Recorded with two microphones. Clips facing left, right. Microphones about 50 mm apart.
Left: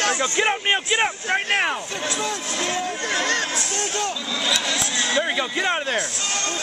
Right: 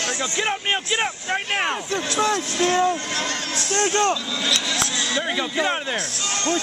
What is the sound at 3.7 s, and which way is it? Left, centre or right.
Speech, right.